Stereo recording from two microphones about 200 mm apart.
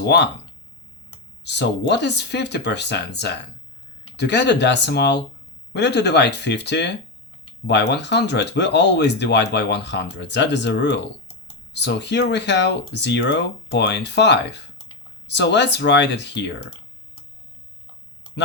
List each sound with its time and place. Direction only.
0.0 s speech: 55° left (ahead or behind)
1.5 s speech: 60° left (ahead or behind)